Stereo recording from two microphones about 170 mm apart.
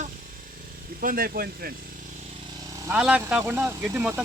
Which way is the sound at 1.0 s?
55° right (ahead or behind).